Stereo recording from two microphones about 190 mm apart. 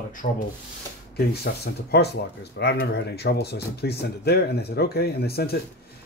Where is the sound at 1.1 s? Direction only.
55° left (ahead or behind).